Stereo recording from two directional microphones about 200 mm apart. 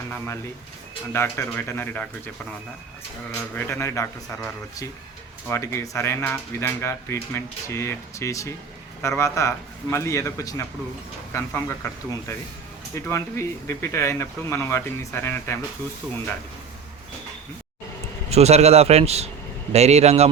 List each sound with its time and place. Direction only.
1.1 s speech: 10° left (ahead or behind)
3.3 s speech: 10° left (ahead or behind)
12.9 s speech: 15° left (ahead or behind)
18.3 s speech: 30° right (ahead or behind)